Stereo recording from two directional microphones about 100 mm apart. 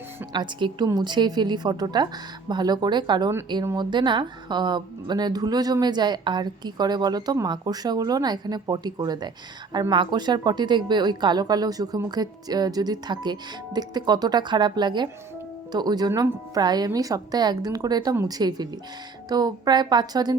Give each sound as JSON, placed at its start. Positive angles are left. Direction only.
{"t": 0.3, "sound": "a woman's voice", "side_deg": -45}